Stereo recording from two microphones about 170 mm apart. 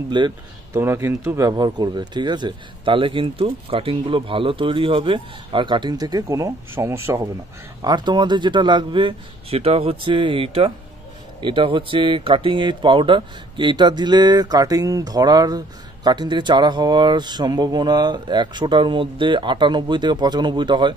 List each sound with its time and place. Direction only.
0.2 s speech: 25° right (ahead or behind)
0.7 s speech: 15° right (ahead or behind)